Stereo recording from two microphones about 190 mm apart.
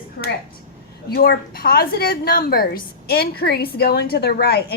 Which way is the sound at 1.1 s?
55° left (ahead or behind).